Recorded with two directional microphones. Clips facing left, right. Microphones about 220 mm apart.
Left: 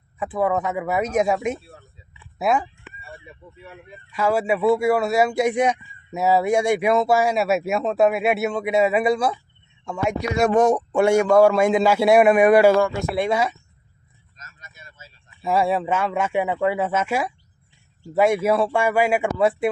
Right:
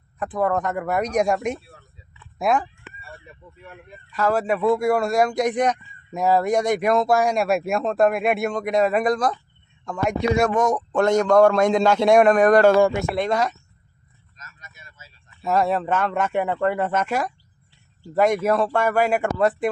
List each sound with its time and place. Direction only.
0.2 s speech: 5° left (ahead or behind)
10.5 s speech: 30° left (ahead or behind)
10.8 s speech: 10° left (ahead or behind)
14.3 s a sound: 30° left (ahead or behind)
15.4 s speech: 10° left (ahead or behind)